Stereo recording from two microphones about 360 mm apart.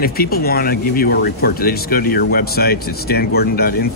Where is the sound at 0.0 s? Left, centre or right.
Left.